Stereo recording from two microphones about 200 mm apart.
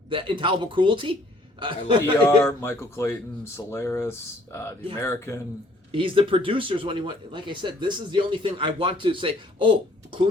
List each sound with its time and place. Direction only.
0.1 s speech: 25° right (ahead or behind)
2.0 s a man's voice: 10° left (ahead or behind)
5.9 s speech: 25° right (ahead or behind)